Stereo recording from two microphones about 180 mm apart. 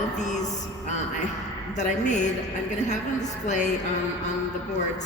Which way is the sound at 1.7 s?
40° left (ahead or behind).